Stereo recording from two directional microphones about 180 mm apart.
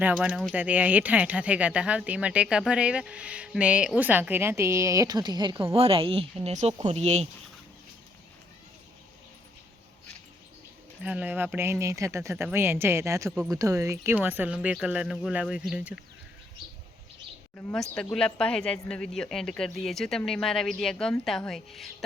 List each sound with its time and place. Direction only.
0.0 s speech: 10° right (ahead or behind); by 7.3 s 35° right (ahead or behind)
11.0 s speech: 10° right (ahead or behind)
18.1 s speech: 5° left (ahead or behind)